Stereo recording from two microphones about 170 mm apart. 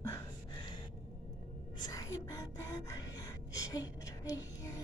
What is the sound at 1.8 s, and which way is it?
Speech, 20° left (ahead or behind).